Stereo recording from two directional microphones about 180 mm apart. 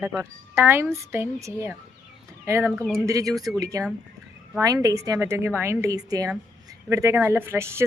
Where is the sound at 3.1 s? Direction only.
20° right (ahead or behind).